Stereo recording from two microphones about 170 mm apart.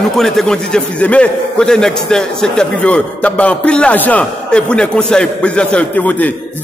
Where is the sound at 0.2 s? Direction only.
5° left (ahead or behind).